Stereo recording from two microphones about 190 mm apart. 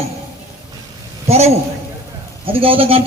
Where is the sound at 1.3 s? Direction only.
35° right (ahead or behind).